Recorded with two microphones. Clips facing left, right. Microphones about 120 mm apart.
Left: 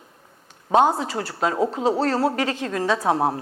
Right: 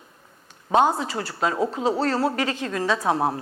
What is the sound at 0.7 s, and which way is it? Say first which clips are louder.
Speech: left 2 dB; 45° left (ahead or behind).